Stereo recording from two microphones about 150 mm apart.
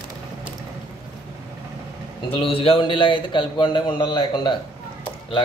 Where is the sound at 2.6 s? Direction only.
35° left (ahead or behind).